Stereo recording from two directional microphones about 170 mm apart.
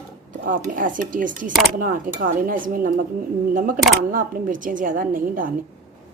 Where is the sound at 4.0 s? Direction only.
55° right (ahead or behind).